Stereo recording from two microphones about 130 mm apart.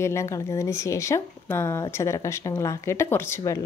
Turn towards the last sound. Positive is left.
turn(degrees=20)  # may be behind; listen again after turning